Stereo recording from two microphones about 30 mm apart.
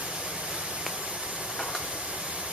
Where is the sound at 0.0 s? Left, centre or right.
Right.